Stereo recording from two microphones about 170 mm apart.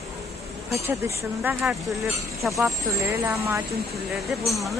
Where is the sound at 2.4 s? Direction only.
Centre (ahead or behind).